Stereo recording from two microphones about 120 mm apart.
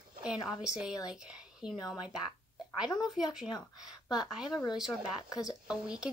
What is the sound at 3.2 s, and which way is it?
A woman's voice, 5° right (ahead or behind).